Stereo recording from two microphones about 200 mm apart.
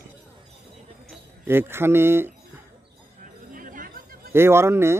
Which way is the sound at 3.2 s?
40° right (ahead or behind).